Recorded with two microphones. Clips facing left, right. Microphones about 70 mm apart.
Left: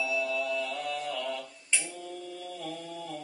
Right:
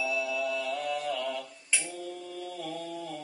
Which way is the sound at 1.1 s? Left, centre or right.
Centre.